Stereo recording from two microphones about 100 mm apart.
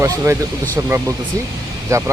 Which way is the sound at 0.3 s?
35° right (ahead or behind).